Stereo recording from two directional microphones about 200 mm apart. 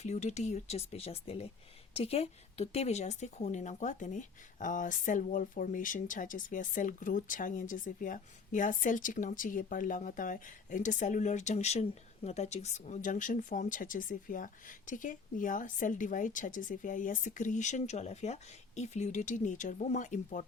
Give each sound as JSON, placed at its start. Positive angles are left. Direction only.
{"t": 0.0, "sound": "speech", "side_deg": 35}